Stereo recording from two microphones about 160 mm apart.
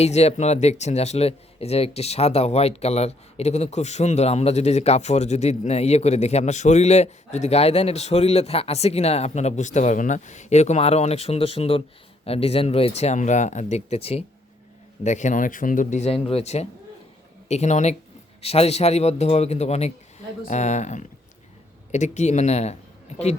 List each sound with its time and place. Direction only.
0.0 s speech: 40° left (ahead or behind)
15.0 s a man's voice: 50° left (ahead or behind)